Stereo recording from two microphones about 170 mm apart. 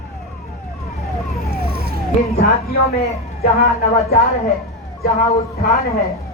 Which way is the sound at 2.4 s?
65° left (ahead or behind).